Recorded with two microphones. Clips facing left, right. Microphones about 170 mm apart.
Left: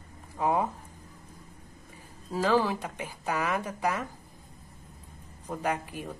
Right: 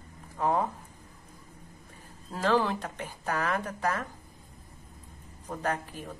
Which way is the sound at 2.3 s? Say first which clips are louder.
Left 1 dB; 5° left (ahead or behind).